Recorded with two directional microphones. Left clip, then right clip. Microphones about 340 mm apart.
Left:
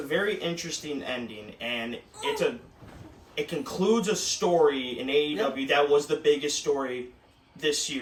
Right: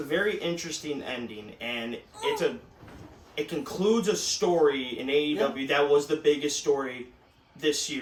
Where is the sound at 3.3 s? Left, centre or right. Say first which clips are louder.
Left 1 dB; centre.